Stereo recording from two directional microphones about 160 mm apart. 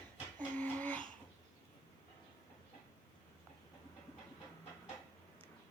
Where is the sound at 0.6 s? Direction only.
10° left (ahead or behind).